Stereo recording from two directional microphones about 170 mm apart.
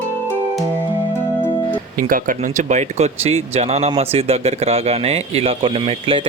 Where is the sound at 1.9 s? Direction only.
55° right (ahead or behind).